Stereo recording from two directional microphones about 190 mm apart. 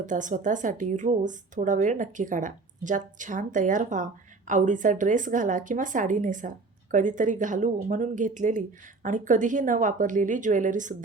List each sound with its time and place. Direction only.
0.0 s a woman's voice: 40° right (ahead or behind)